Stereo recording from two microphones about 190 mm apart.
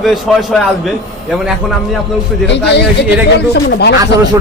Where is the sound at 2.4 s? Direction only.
65° left (ahead or behind).